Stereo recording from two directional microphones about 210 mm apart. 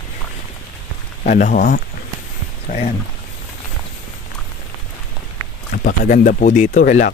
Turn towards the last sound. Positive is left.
turn(degrees=40)  # may be behind; listen again after turning